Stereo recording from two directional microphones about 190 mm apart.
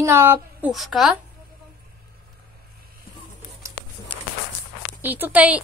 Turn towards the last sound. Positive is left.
turn(degrees=-5)  # may be behind; listen again after turning